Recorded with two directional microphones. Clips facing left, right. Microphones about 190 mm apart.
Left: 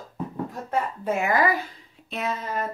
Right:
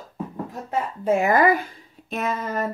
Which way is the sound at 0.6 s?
25° right (ahead or behind).